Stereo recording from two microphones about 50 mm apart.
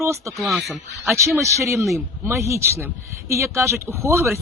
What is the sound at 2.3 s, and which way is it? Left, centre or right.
Speech, right.